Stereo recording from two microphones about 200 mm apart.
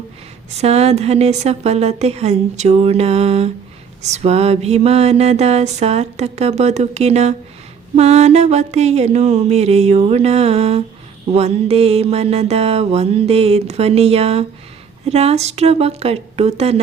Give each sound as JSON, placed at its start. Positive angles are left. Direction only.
{"t": 0.6, "sound": "mantra", "side_deg": -30}